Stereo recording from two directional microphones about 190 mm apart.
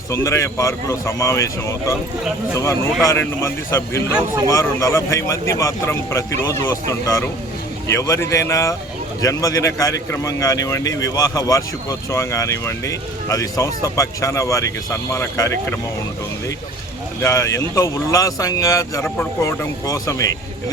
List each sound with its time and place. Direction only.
0.1 s speech: 15° left (ahead or behind)
3.0 s speech: 15° left (ahead or behind)
17.2 s speech: 15° left (ahead or behind)